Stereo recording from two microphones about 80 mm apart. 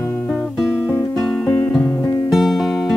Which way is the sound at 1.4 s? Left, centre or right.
Left.